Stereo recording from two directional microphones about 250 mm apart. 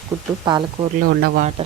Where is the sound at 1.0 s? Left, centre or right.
Right.